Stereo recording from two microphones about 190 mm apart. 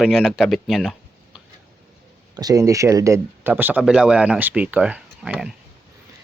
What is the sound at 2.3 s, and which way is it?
Speech, 20° right (ahead or behind).